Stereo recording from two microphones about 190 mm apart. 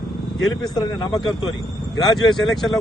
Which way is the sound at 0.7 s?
20° left (ahead or behind).